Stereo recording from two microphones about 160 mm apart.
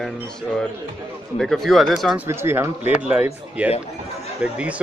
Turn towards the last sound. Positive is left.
turn(degrees=-5)  # may be behind; listen again after turning